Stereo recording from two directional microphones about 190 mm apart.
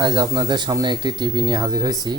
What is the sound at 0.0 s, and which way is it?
Speech, 25° right (ahead or behind).